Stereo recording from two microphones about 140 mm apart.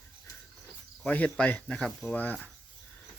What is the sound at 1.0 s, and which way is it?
Speech, 10° left (ahead or behind).